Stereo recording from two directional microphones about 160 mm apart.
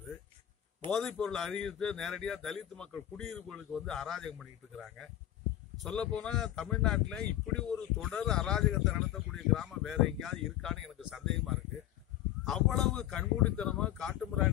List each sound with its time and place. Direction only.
0.9 s speech: 5° left (ahead or behind)